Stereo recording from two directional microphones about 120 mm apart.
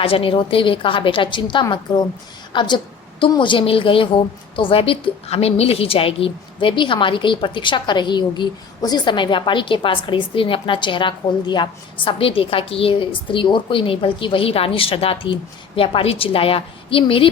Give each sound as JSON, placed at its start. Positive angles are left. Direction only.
{"t": 0.0, "sound": "a woman's voice", "side_deg": 50}